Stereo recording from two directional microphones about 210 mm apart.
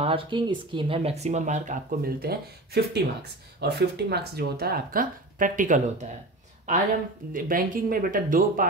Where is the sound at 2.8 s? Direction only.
50° right (ahead or behind); by 6.0 s 35° right (ahead or behind).